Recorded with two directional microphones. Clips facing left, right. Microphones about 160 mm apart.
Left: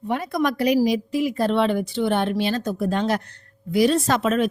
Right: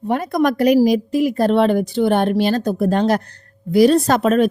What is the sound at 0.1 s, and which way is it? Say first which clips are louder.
A woman's voice: right 5 dB; 45° right (ahead or behind).